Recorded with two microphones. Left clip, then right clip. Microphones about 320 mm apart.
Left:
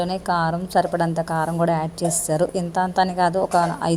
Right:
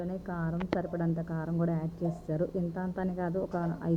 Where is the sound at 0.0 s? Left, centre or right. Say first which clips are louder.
Left 17 dB; right.